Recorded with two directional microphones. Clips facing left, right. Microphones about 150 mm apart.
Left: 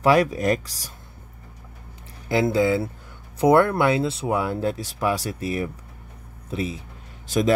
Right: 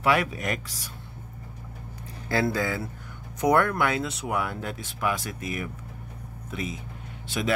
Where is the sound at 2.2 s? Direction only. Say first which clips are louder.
Left 6 dB; 20° left (ahead or behind).